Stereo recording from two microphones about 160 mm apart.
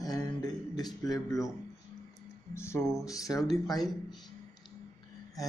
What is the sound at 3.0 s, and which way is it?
Speech, 20° left (ahead or behind).